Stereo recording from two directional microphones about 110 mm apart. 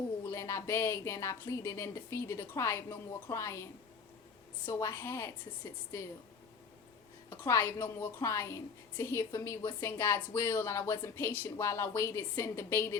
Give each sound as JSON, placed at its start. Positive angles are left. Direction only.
{"t": 0.3, "sound": "speech", "side_deg": 25}
{"t": 7.3, "sound": "speech", "side_deg": 25}